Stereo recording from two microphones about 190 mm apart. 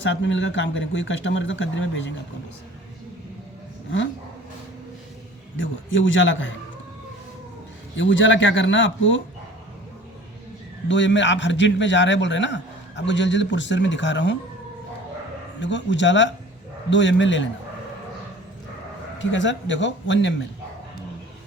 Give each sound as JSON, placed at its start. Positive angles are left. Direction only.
{"t": 0.0, "sound": "speech", "side_deg": 75}
{"t": 5.5, "sound": "speech", "side_deg": 85}
{"t": 7.9, "sound": "speech", "side_deg": 80}
{"t": 10.8, "sound": "a man's voice", "side_deg": 75}
{"t": 15.6, "sound": "a man's voice", "side_deg": 70}
{"t": 19.2, "sound": "a man's voice", "side_deg": 75}